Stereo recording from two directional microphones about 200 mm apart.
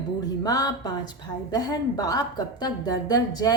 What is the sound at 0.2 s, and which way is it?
A woman's voice, 20° left (ahead or behind).